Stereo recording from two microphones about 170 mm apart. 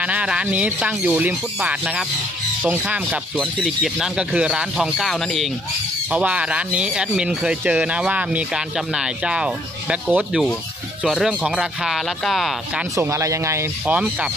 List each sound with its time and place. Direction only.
0.0 s speech: 5° right (ahead or behind)
3.3 s speech: 5° left (ahead or behind)
12.9 s speech: 15° right (ahead or behind)